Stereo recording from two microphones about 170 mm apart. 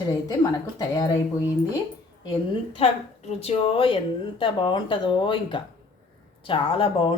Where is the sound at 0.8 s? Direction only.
20° left (ahead or behind).